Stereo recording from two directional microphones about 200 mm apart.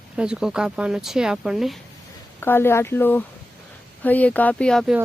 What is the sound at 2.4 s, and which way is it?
Speech, 10° left (ahead or behind).